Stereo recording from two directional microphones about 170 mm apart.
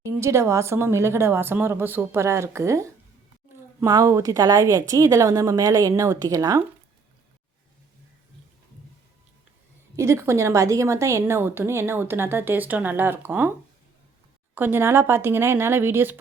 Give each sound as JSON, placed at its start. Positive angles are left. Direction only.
{"t": 0.0, "sound": "a woman's voice", "side_deg": -15}
{"t": 9.9, "sound": "a woman's voice", "side_deg": -15}
{"t": 14.5, "sound": "a woman's voice", "side_deg": -10}